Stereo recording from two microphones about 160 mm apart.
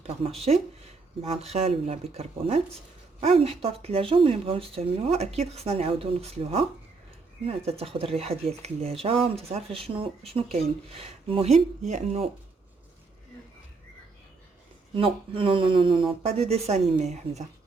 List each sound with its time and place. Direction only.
0.2 s speech: 40° right (ahead or behind)
14.9 s speech: 35° right (ahead or behind)